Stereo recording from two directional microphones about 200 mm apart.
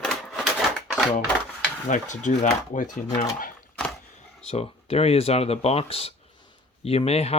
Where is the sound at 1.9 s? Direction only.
40° left (ahead or behind).